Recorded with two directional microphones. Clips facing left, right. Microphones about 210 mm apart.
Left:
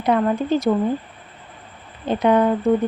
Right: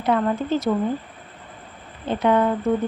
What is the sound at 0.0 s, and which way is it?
Speech, 15° left (ahead or behind).